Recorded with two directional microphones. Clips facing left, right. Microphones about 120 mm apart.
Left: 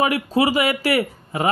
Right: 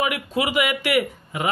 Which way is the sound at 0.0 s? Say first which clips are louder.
Left 5 dB; 35° left (ahead or behind).